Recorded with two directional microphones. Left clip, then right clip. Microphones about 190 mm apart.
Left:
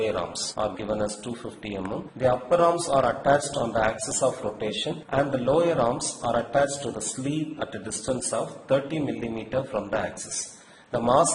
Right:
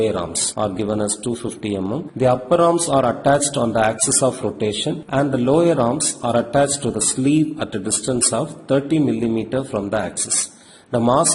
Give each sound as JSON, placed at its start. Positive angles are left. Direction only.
{"t": 0.0, "sound": "a man's voice", "side_deg": -25}